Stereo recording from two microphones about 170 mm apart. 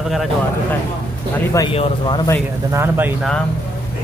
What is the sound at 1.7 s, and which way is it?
Speech, 35° left (ahead or behind).